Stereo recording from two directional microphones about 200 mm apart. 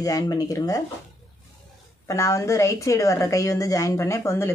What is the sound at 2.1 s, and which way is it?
Speech, 15° left (ahead or behind).